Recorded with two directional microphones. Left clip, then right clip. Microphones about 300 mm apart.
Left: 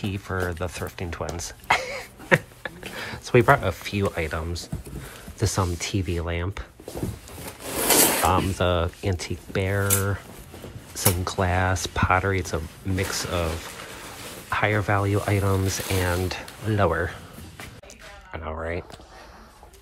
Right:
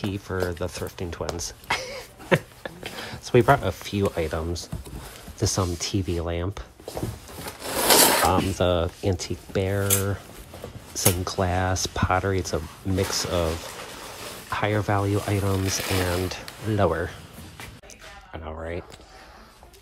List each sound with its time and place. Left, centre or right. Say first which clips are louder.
0.0 s speech: even; centre
1.3 s throat clearing: left 7 dB; centre
3.0 s speech: left 1 dB; centre
7.4 s wood: right 3 dB; right
8.3 s speech: even; centre
14.5 s speech: left 2 dB; centre
16.3 s music: left 1 dB; centre
18.3 s a sound: left 3 dB; centre